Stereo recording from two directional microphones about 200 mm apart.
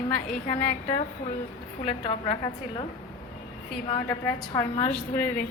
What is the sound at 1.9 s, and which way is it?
Speech, 25° left (ahead or behind).